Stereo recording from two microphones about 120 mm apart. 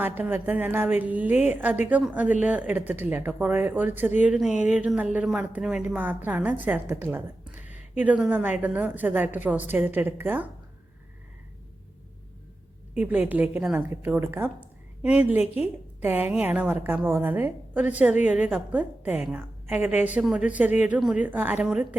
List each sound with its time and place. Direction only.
0.0 s a woman's voice: 15° right (ahead or behind)
13.0 s a woman's voice: 15° right (ahead or behind)